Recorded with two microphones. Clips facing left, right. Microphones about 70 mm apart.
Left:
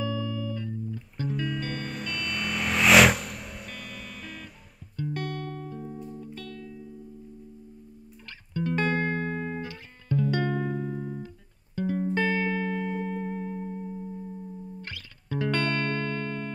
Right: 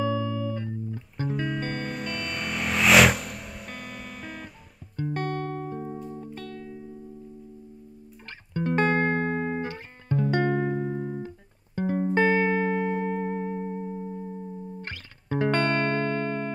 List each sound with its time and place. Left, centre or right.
0.0 s music: right
1.4 s music: centre
4.9 s music: right
8.5 s music: right